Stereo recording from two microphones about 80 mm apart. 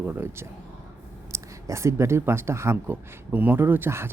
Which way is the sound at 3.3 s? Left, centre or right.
Right.